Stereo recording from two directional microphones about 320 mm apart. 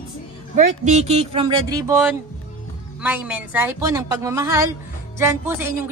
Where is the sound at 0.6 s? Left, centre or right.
Right.